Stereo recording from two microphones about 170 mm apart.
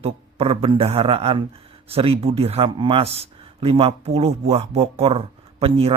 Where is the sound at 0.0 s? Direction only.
35° right (ahead or behind).